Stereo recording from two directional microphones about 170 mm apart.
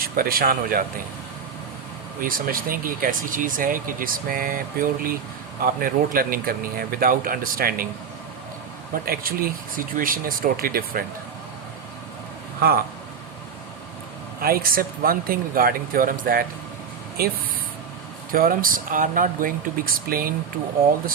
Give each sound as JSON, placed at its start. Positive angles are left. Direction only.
{"t": 0.0, "sound": "speech", "side_deg": -60}
{"t": 2.2, "sound": "speech", "side_deg": -55}
{"t": 9.0, "sound": "speech", "side_deg": -60}
{"t": 14.4, "sound": "speech", "side_deg": -60}